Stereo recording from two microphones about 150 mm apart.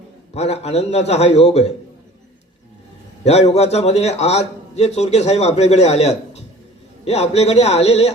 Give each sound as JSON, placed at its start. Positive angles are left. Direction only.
{"t": 0.3, "sound": "a man's voice", "side_deg": 45}
{"t": 3.2, "sound": "a man's voice", "side_deg": 45}